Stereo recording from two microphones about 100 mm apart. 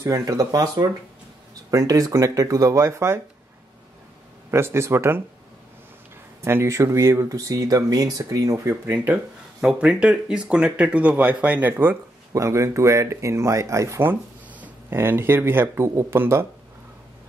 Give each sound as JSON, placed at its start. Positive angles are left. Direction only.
{"t": 0.0, "sound": "speech", "side_deg": -35}
{"t": 4.5, "sound": "speech", "side_deg": -25}
{"t": 6.4, "sound": "speech", "side_deg": -25}